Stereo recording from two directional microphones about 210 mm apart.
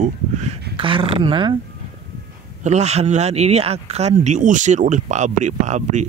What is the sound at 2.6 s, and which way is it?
Speech, 30° right (ahead or behind).